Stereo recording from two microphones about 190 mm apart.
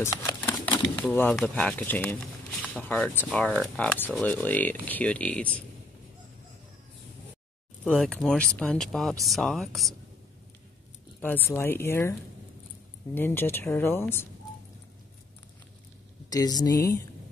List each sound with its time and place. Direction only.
0.0 s speech: 15° left (ahead or behind)
7.8 s speech: 5° left (ahead or behind)
11.1 s speech: 10° left (ahead or behind)
16.3 s speech: 20° left (ahead or behind)